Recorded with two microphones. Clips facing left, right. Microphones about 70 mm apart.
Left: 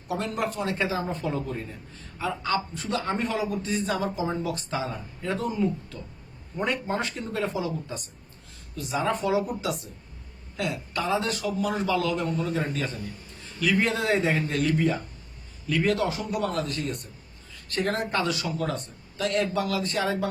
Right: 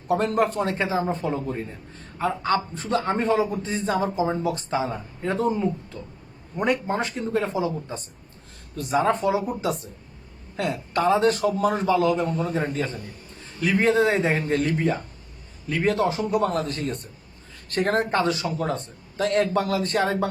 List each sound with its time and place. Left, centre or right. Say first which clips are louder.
0.1 s a man's voice: right 7 dB; right
2.1 s a man's voice: right 4 dB; right
8.7 s a man's voice: right 5 dB; right
11.9 s a man's voice: right 5 dB; right